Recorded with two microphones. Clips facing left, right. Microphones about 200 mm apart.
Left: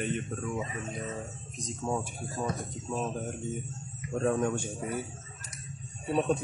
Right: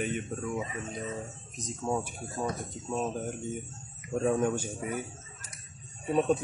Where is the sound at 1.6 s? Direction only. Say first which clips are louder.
Right 1 dB; centre (ahead or behind).